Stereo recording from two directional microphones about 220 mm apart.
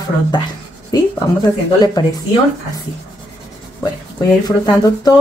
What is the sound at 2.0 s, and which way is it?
Speech, 15° left (ahead or behind).